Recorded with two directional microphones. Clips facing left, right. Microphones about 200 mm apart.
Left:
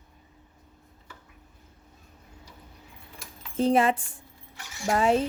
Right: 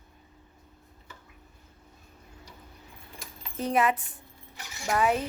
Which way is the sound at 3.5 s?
30° left (ahead or behind).